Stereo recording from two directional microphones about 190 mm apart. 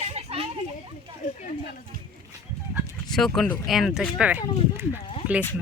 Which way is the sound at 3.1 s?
Centre (ahead or behind).